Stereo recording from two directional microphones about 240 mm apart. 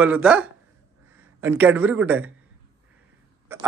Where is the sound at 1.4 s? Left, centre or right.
Centre.